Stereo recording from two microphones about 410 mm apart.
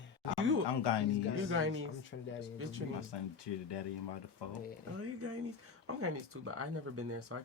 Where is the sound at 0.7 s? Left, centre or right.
Left.